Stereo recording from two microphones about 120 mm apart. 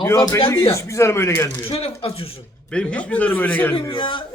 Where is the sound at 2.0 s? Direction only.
50° left (ahead or behind).